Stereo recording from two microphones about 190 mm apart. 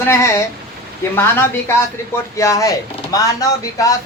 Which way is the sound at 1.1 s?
10° left (ahead or behind).